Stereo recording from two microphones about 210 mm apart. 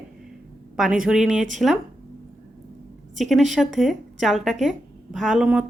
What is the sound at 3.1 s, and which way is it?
A woman's voice, centre (ahead or behind).